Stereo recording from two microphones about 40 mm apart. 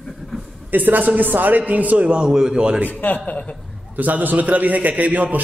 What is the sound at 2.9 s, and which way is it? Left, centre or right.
Speech, left.